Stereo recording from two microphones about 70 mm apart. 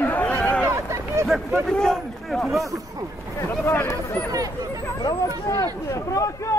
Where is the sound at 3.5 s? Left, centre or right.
Left.